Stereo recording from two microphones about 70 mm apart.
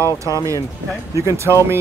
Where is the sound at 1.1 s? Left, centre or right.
Right.